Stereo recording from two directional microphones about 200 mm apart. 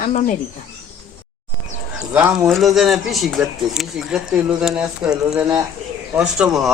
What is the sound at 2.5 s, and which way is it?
Speech, centre (ahead or behind).